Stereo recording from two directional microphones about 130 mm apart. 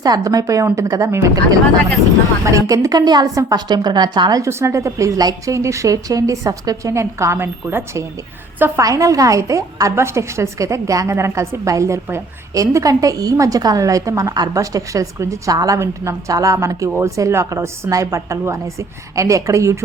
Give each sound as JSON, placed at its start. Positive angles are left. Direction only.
{"t": 0.0, "sound": "a woman's voice", "side_deg": -30}